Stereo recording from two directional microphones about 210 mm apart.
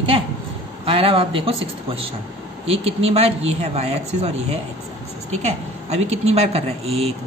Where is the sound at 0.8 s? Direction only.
25° right (ahead or behind).